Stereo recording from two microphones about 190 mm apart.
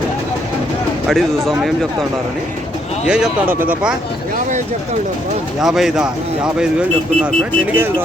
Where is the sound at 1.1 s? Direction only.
Centre (ahead or behind).